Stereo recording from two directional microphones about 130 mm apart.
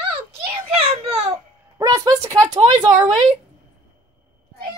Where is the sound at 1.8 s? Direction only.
25° right (ahead or behind).